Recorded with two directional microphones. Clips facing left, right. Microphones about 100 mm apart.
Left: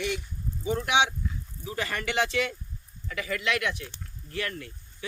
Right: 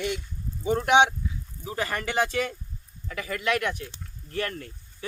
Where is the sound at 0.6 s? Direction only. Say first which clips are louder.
Right 5 dB; 45° right (ahead or behind).